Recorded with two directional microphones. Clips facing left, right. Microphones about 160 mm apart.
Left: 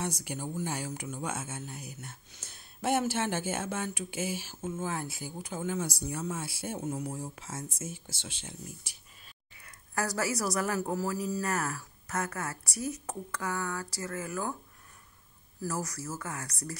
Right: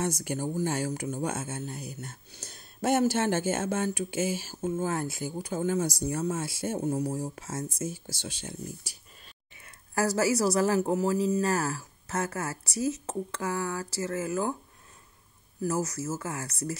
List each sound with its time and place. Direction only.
0.0 s speech: 45° right (ahead or behind)
9.6 s speech: 25° right (ahead or behind)
15.6 s speech: 25° right (ahead or behind)